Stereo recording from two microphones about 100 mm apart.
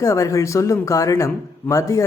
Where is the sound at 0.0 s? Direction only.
35° left (ahead or behind).